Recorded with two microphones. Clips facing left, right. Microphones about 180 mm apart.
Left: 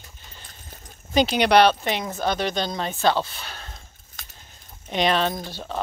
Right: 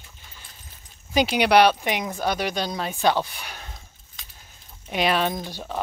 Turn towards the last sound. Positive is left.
turn(degrees=-15)  # may be behind; listen again after turning